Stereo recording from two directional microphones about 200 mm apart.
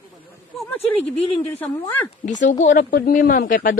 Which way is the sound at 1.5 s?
10° left (ahead or behind).